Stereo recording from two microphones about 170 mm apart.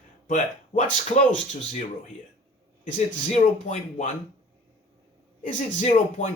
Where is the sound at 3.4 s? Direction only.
45° left (ahead or behind).